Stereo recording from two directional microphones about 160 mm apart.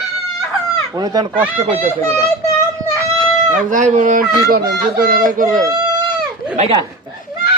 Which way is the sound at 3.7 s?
50° right (ahead or behind).